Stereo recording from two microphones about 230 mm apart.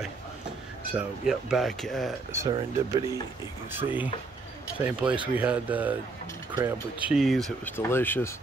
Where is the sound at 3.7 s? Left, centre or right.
Centre.